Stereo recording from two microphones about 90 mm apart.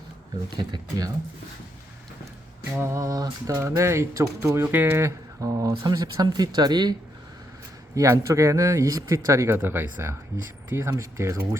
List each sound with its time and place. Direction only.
0.5 s speech: 50° right (ahead or behind)
2.8 s speech: 35° right (ahead or behind)
7.9 s speech: 35° right (ahead or behind)
9.6 s speech: 20° right (ahead or behind)